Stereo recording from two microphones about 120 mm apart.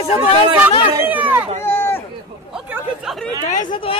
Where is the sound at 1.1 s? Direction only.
15° right (ahead or behind).